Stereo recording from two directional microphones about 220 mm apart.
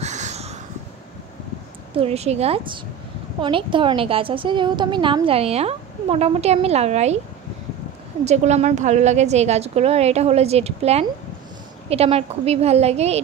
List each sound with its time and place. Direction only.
0.0 s a sound: 30° right (ahead or behind)
2.0 s a woman's voice: 30° right (ahead or behind)
8.3 s a woman's voice: 30° right (ahead or behind)